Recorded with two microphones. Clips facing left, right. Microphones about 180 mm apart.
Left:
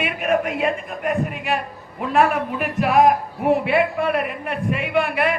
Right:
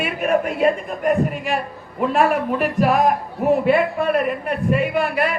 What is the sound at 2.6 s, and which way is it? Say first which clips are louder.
A man's voice: left 2 dB; 40° right (ahead or behind).